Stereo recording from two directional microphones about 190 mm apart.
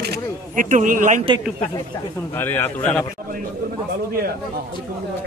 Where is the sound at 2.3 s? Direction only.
10° left (ahead or behind).